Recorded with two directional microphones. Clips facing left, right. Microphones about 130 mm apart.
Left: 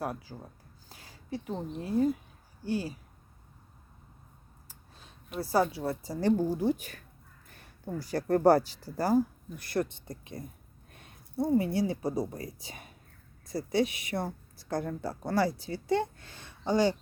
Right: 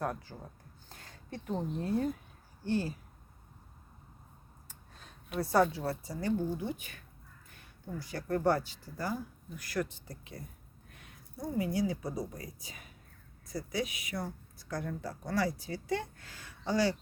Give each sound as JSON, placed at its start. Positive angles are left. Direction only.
{"t": 0.0, "sound": "speech", "side_deg": 10}
{"t": 5.3, "sound": "speech", "side_deg": 0}
{"t": 5.6, "sound": "speech", "side_deg": 15}
{"t": 6.1, "sound": "speech", "side_deg": 35}
{"t": 14.1, "sound": "speech", "side_deg": 40}
{"t": 14.7, "sound": "speech", "side_deg": 30}